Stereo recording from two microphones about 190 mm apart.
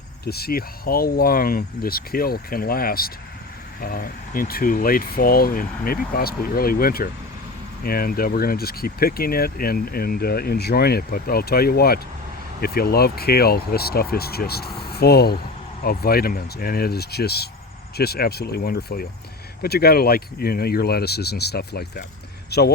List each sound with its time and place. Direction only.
0.3 s speech: 55° left (ahead or behind)